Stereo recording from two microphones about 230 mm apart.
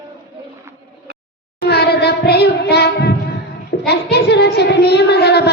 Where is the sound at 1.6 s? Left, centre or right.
Left.